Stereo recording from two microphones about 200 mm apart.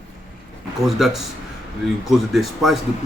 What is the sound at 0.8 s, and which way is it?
Speech, centre (ahead or behind).